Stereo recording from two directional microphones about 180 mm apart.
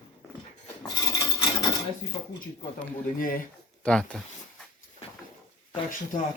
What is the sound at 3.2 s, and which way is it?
Speech, 50° left (ahead or behind).